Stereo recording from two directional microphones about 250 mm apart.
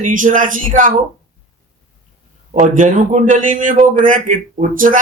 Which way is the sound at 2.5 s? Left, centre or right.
Right.